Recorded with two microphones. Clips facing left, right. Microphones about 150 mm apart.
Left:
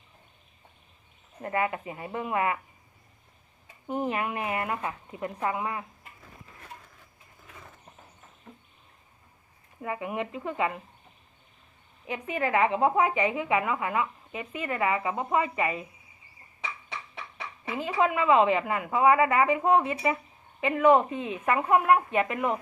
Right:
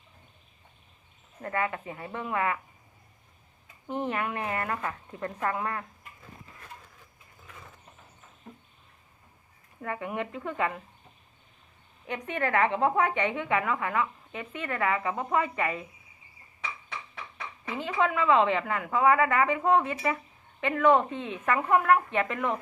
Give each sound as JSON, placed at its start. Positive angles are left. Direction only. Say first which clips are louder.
{"t": 1.4, "sound": "a woman's voice", "louder": "left 2 dB", "side_deg": 20}
{"t": 3.8, "sound": "a woman's voice", "louder": "left 1 dB", "side_deg": 10}
{"t": 9.8, "sound": "a woman's voice", "louder": "left 1 dB", "side_deg": 5}
{"t": 12.0, "sound": "a woman's voice", "louder": "left 1 dB", "side_deg": 5}
{"t": 17.7, "sound": "a woman's voice", "louder": "left 1 dB", "side_deg": 10}